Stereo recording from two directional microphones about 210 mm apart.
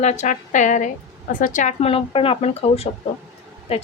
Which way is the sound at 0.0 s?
35° left (ahead or behind).